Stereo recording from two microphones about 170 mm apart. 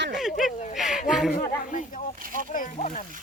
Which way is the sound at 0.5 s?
45° left (ahead or behind).